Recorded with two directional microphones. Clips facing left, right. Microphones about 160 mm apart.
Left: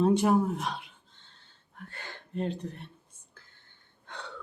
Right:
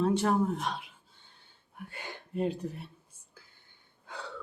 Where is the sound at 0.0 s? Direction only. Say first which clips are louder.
Left 3 dB; 15° left (ahead or behind).